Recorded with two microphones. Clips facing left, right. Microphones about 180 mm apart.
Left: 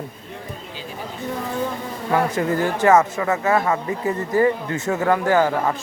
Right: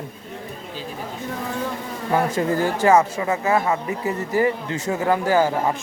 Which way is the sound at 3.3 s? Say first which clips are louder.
Left 1 dB; 25° right (ahead or behind).